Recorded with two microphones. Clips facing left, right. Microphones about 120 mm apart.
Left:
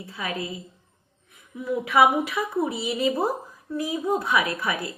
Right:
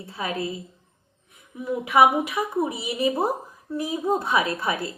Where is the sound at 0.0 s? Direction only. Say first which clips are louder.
Right 2 dB; 25° right (ahead or behind).